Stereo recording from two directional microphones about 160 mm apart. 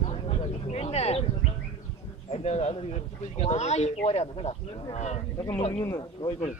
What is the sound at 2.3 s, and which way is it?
A man's voice, 45° left (ahead or behind).